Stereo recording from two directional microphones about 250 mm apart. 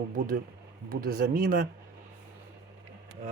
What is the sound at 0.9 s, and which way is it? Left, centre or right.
Speech, right.